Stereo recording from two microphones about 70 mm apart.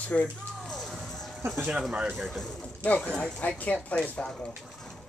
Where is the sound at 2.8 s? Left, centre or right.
Centre.